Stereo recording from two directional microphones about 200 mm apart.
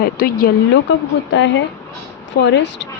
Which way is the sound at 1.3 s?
70° left (ahead or behind).